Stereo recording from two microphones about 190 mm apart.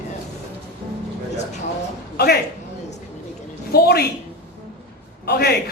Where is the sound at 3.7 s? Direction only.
55° left (ahead or behind).